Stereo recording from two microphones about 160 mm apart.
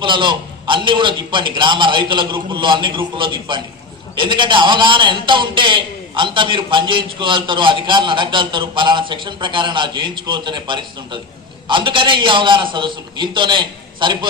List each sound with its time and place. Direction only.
0.0 s a man's voice: 30° right (ahead or behind)